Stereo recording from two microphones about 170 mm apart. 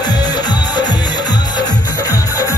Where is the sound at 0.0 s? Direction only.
25° left (ahead or behind).